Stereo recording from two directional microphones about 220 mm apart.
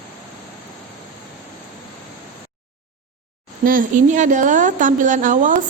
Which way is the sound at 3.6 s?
40° right (ahead or behind).